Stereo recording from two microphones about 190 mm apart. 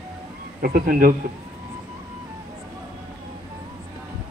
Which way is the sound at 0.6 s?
50° right (ahead or behind).